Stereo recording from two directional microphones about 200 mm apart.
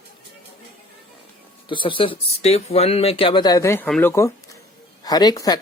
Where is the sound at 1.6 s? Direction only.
25° left (ahead or behind).